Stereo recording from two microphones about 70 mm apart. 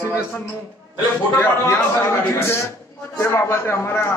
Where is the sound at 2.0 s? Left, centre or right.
Left.